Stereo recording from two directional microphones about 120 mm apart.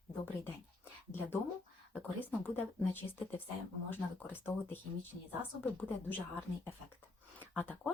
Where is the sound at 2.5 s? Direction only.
15° left (ahead or behind).